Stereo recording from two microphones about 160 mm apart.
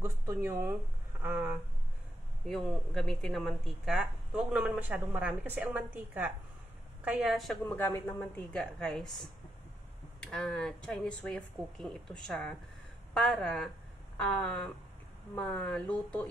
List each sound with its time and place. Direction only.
0.0 s speech: 15° right (ahead or behind)
2.4 s speech: centre (ahead or behind)
7.6 s speech: 15° left (ahead or behind)
10.2 s speech: 5° left (ahead or behind)